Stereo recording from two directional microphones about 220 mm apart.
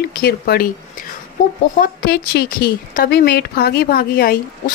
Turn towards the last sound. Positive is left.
turn(degrees=45)  # may be behind; listen again after turning